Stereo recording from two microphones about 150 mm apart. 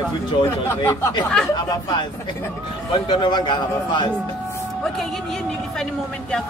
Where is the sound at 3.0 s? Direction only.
30° left (ahead or behind).